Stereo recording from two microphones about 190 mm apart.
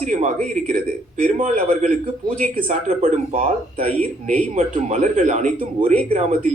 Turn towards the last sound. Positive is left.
turn(degrees=-35)  # may be behind; listen again after turning